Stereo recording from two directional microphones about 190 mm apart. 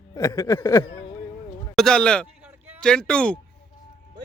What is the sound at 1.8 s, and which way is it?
Speech, 5° left (ahead or behind).